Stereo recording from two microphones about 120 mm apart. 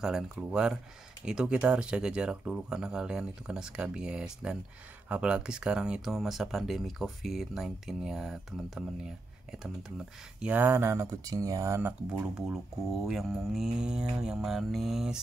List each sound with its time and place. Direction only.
0.0 s speech: 5° right (ahead or behind)
10.4 s speech: 15° right (ahead or behind)
12.1 s speech: 5° right (ahead or behind)